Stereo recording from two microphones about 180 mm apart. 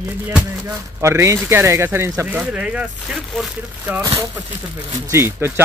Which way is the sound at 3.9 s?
15° right (ahead or behind).